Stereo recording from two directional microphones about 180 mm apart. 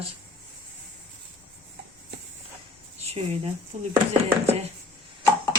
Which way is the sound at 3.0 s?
35° right (ahead or behind).